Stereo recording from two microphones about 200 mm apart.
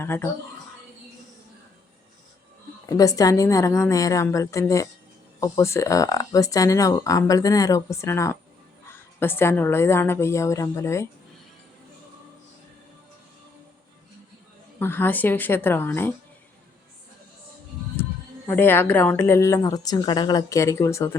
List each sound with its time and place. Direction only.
0.0 s speech: 10° left (ahead or behind)
2.8 s speech: 15° left (ahead or behind)
14.8 s speech: 10° left (ahead or behind)
18.4 s speech: 10° left (ahead or behind)